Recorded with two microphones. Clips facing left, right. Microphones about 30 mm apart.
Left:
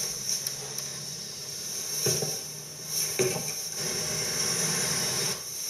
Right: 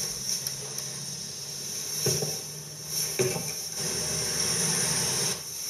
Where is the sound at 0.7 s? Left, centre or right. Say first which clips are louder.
Even; centre.